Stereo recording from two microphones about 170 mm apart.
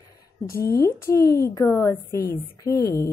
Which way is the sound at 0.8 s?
15° left (ahead or behind).